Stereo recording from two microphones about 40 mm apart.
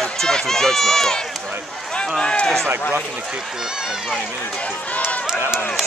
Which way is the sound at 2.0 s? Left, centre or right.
Left.